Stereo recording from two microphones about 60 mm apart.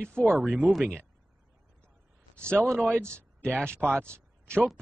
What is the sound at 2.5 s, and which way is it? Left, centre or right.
Speech, right.